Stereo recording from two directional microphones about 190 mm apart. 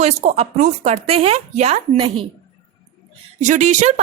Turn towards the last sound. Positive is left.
turn(degrees=-40)  # may be behind; listen again after turning